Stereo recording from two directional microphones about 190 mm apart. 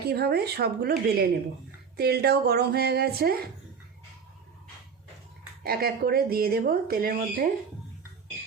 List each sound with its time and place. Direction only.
0.0 s speech: 55° right (ahead or behind)
5.6 s speech: 55° right (ahead or behind)